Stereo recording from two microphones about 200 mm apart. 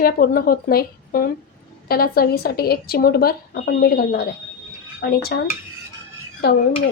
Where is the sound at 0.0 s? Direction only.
45° left (ahead or behind).